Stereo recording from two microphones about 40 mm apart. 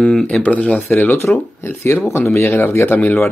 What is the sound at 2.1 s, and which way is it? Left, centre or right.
Speech, left.